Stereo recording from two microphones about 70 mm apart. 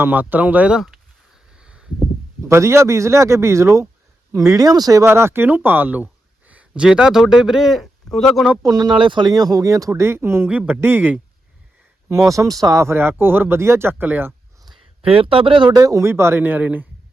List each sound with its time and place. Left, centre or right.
0.0 s speech: right
1.5 s a sound: centre
2.5 s speech: right
4.3 s speech: right
5.0 s speech: right
6.5 s a sound: centre
6.8 s a man's voice: centre
8.6 s speech: right
9.9 s speech: right
12.3 s speech: right
15.7 s speech: right